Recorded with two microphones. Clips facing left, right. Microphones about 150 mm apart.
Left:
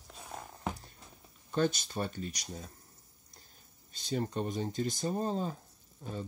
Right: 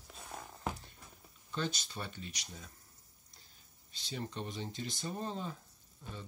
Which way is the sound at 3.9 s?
45° left (ahead or behind).